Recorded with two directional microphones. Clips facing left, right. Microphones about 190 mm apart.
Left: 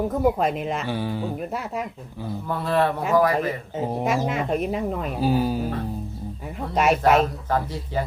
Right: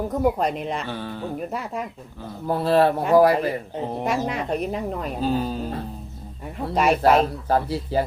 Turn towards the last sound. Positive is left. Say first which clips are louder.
# right 3 dB
turn(degrees=-35)  # may be behind; listen again after turning